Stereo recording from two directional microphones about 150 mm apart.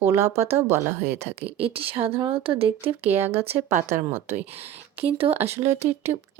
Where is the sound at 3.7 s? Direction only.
60° right (ahead or behind).